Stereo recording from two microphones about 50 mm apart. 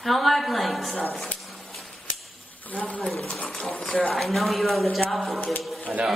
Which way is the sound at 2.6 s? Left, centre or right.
Left.